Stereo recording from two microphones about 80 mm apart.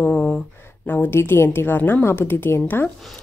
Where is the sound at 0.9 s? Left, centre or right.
Left.